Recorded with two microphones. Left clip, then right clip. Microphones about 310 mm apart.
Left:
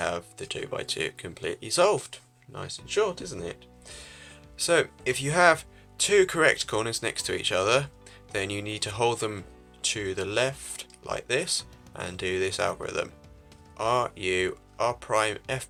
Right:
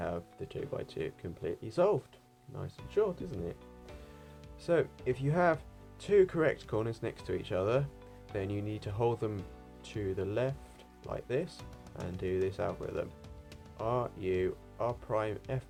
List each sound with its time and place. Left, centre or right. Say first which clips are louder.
0.0 s speech: left 8 dB; left